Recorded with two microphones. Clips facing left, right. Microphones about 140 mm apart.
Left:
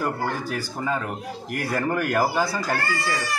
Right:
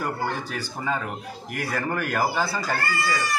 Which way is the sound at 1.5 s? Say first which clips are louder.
Left 3 dB; 45° left (ahead or behind).